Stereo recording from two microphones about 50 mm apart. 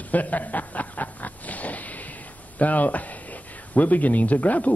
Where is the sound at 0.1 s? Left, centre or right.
Left.